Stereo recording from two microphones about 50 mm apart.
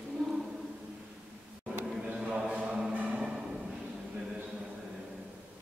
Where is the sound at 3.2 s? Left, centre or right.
Centre.